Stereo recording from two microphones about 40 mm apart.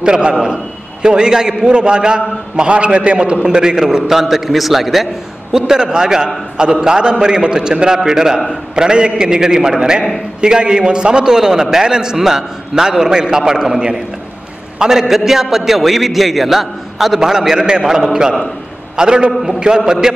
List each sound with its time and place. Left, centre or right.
0.0 s a man's voice: right; by 5.0 s centre
5.5 s a man's voice: centre